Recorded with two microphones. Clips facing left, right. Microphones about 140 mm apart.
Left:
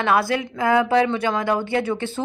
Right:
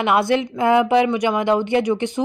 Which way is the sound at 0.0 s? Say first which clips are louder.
Right 3 dB; 20° right (ahead or behind).